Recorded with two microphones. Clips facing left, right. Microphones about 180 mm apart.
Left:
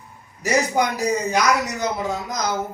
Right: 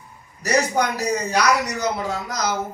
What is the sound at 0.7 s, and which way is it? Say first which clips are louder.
Speech: left 1 dB; 20° left (ahead or behind).